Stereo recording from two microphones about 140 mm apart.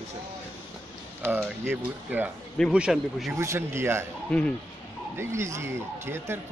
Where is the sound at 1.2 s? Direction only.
15° right (ahead or behind).